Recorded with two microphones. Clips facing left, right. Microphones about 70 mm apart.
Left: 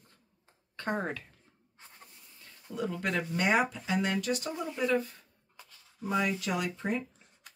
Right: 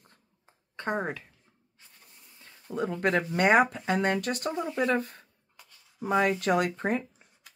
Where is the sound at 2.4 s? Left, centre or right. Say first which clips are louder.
Right 4 dB; right.